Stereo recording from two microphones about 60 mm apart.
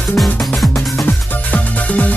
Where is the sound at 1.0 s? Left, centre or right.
Left.